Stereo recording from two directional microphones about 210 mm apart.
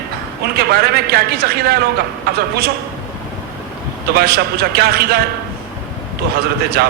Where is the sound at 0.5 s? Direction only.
50° right (ahead or behind).